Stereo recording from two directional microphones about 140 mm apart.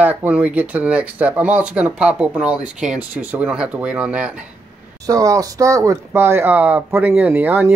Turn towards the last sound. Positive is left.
turn(degrees=-15)  # may be behind; listen again after turning